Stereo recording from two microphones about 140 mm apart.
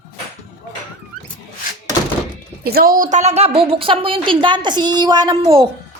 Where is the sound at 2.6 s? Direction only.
90° right; by 5.6 s 40° right (ahead or behind).